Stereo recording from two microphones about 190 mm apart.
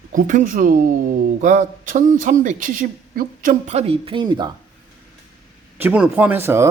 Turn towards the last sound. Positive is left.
turn(degrees=-10)  # may be behind; listen again after turning